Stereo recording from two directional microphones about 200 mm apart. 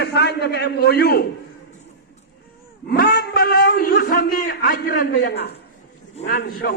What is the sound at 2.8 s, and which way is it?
A man's voice, 50° left (ahead or behind).